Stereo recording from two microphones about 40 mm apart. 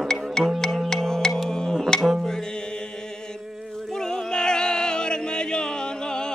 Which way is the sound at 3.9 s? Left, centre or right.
Centre.